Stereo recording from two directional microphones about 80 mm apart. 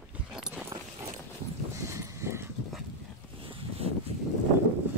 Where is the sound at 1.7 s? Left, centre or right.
Right.